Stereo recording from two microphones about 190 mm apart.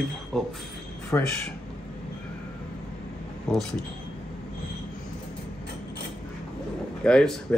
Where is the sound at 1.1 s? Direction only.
15° left (ahead or behind).